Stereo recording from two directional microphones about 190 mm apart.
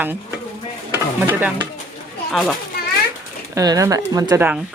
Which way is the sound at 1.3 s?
10° right (ahead or behind).